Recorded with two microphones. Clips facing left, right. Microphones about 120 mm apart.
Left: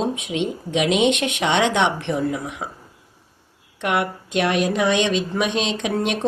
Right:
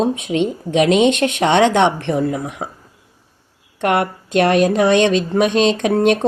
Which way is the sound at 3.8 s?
45° right (ahead or behind).